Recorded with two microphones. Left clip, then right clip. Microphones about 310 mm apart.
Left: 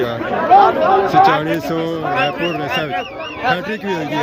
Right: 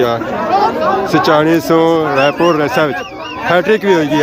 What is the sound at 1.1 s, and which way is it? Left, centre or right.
Speech, centre.